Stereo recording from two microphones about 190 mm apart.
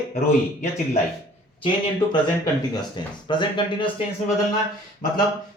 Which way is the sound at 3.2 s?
25° left (ahead or behind).